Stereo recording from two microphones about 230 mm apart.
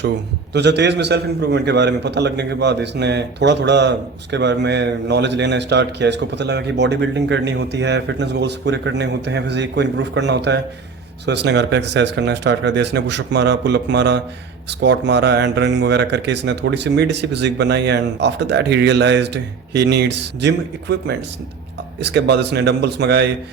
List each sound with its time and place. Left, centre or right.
0.5 s a man's voice: right